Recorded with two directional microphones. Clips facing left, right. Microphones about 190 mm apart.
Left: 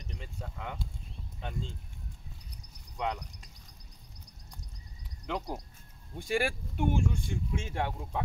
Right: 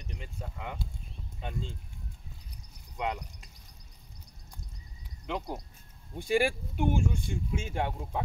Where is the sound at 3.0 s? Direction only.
10° right (ahead or behind).